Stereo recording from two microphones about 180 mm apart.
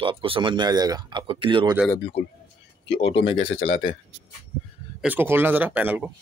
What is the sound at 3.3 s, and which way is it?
Speech, 30° left (ahead or behind).